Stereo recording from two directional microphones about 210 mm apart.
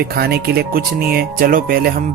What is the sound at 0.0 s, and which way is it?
Speech, 50° right (ahead or behind).